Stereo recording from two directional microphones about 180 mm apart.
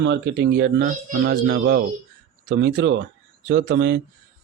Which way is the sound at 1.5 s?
80° right.